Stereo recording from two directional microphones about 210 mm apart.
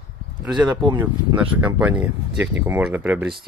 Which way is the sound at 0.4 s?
5° right (ahead or behind).